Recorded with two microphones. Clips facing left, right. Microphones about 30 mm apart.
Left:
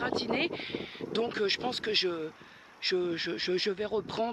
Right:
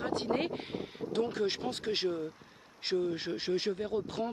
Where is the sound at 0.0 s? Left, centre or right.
Left.